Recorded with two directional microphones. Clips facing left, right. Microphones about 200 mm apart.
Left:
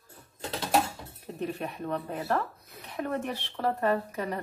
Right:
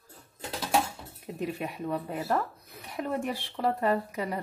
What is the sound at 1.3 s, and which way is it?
Speech, 10° right (ahead or behind).